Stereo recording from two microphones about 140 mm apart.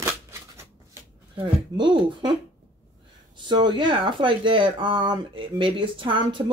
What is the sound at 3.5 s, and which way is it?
Speech, 35° right (ahead or behind).